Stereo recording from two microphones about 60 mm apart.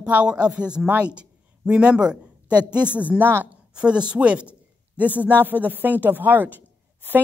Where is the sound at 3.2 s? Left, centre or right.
Right.